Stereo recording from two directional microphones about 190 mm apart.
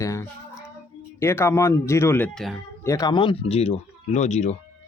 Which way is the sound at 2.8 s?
15° left (ahead or behind).